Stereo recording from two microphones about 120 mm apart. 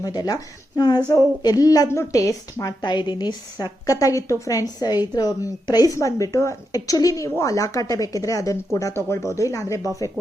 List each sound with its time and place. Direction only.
0.0 s a woman's voice: 30° left (ahead or behind)
2.8 s a woman's voice: 40° left (ahead or behind)